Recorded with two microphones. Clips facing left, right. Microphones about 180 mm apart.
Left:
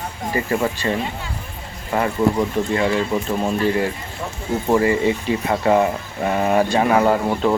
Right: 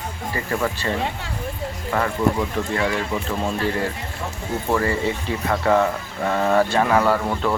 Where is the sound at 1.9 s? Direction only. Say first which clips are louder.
Left 3 dB; 15° left (ahead or behind).